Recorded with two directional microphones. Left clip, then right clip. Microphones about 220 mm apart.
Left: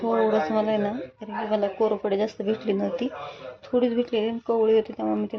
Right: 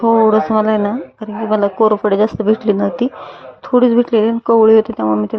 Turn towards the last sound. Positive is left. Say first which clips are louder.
# right 11 dB
turn(degrees=-25)  # may be behind; listen again after turning